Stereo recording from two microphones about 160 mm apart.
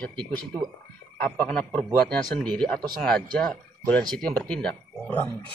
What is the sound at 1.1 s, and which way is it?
Speech, 10° left (ahead or behind).